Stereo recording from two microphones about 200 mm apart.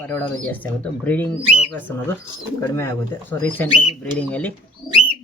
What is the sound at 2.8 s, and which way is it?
Speech, 10° left (ahead or behind).